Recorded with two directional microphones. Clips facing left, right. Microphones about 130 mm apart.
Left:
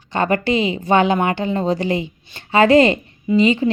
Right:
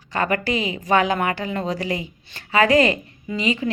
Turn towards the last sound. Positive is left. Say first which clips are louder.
# left 8 dB
turn(degrees=30)  # may be behind; listen again after turning